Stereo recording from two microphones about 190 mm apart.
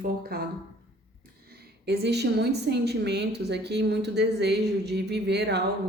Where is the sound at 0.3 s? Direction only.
55° right (ahead or behind).